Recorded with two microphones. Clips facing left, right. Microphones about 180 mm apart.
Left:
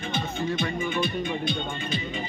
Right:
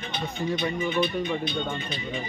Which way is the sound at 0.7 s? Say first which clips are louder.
Right 2 dB; 50° left (ahead or behind).